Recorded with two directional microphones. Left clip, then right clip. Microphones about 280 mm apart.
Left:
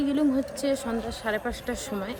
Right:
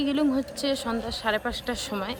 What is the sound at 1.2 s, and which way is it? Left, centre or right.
Speech, centre.